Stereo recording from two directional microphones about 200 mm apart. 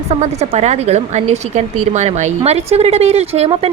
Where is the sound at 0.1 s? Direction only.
30° right (ahead or behind).